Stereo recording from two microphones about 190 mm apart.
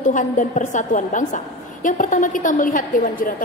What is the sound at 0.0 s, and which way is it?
A woman's voice, 40° left (ahead or behind).